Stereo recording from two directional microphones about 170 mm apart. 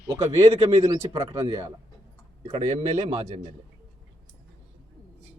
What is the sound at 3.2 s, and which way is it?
Speech, 40° right (ahead or behind).